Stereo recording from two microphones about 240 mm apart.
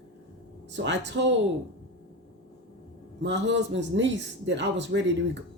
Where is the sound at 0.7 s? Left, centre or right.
Right.